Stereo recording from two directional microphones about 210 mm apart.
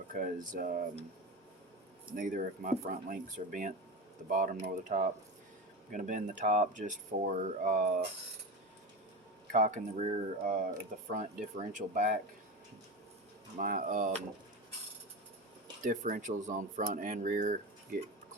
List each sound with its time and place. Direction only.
0.1 s speech: 40° right (ahead or behind)
2.1 s speech: 40° right (ahead or behind)
9.5 s speech: 35° right (ahead or behind)
13.6 s speech: 40° right (ahead or behind)
15.8 s speech: 40° right (ahead or behind)